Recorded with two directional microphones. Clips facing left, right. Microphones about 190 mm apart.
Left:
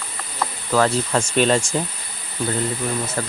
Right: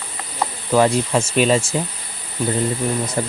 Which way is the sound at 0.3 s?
15° right (ahead or behind).